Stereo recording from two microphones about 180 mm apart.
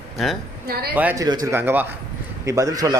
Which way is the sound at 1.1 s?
20° right (ahead or behind).